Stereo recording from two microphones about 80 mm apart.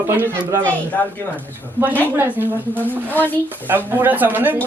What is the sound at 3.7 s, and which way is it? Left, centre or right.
Speech, right.